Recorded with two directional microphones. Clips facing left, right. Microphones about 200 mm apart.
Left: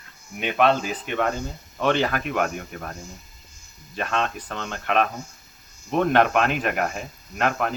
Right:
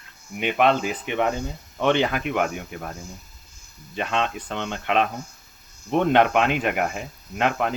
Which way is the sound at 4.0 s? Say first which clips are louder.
Right 1 dB; 20° right (ahead or behind).